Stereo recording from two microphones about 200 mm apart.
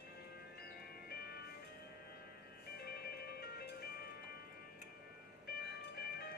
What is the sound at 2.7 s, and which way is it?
Music, 50° left (ahead or behind).